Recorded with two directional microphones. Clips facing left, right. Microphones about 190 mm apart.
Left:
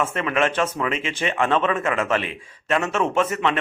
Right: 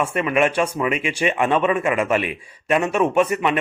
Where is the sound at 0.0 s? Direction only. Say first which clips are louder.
Right 3 dB; 10° right (ahead or behind).